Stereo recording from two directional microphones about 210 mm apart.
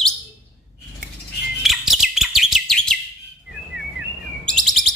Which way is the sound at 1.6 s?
Centre (ahead or behind).